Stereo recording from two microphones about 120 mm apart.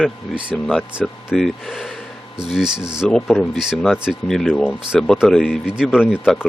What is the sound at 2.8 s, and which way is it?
Speech, 40° right (ahead or behind).